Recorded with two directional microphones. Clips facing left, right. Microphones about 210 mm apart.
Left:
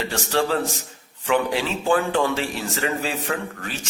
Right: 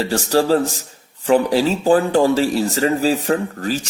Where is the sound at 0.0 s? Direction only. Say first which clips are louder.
Right 6 dB; 35° right (ahead or behind).